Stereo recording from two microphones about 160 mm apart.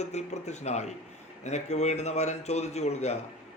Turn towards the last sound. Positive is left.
turn(degrees=45)  # may be behind; listen again after turning